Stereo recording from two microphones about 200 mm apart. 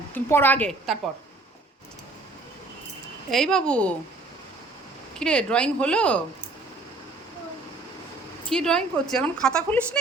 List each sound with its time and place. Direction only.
0.1 s a woman's voice: 10° left (ahead or behind)
3.3 s a woman's voice: centre (ahead or behind)
5.2 s a woman's voice: 5° left (ahead or behind)
8.4 s a woman's voice: 5° left (ahead or behind)